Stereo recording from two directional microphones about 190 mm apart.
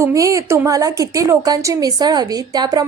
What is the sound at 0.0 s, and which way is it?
A woman's voice, 15° right (ahead or behind).